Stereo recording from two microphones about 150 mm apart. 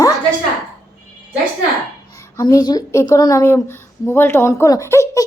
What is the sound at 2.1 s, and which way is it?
A woman's voice, 20° left (ahead or behind).